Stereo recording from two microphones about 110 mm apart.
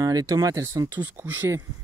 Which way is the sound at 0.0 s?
35° right (ahead or behind).